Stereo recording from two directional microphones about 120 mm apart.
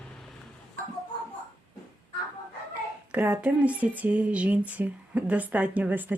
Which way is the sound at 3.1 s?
15° right (ahead or behind).